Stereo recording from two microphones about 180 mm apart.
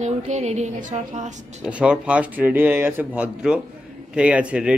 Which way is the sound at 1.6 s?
5° right (ahead or behind).